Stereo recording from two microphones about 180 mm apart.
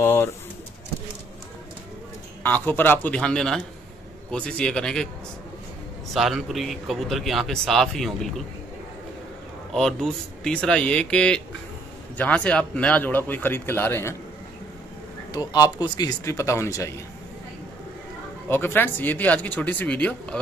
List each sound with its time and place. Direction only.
0.0 s speech: 10° left (ahead or behind)
2.4 s a man's voice: 10° left (ahead or behind)
6.1 s a man's voice: centre (ahead or behind)
9.8 s a man's voice: centre (ahead or behind)
15.3 s speech: 20° left (ahead or behind)
18.5 s speech: 10° left (ahead or behind)